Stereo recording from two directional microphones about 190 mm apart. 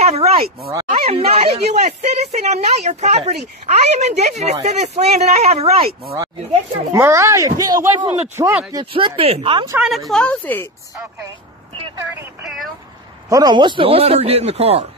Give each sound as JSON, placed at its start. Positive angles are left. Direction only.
{"t": 0.0, "sound": "a sound", "side_deg": -35}
{"t": 0.8, "sound": "speech", "side_deg": -35}
{"t": 6.9, "sound": "a woman's voice", "side_deg": -15}
{"t": 8.9, "sound": "speech", "side_deg": -30}
{"t": 9.7, "sound": "speech", "side_deg": -5}
{"t": 13.3, "sound": "speech", "side_deg": -20}